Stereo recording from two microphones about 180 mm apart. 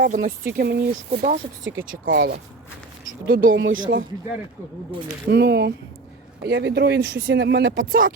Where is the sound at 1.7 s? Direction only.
75° right (ahead or behind).